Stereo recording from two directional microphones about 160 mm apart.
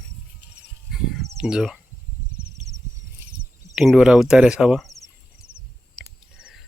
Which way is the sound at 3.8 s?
5° right (ahead or behind).